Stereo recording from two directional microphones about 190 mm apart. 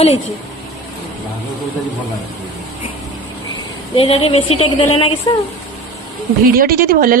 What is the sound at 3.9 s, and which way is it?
A woman's voice, 30° left (ahead or behind).